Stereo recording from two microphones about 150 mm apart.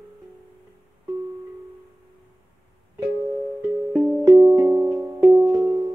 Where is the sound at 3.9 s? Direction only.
5° right (ahead or behind).